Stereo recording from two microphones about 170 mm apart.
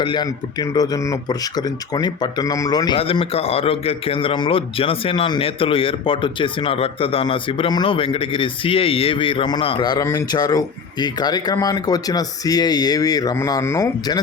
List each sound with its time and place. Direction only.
0.0 s speech: 25° left (ahead or behind)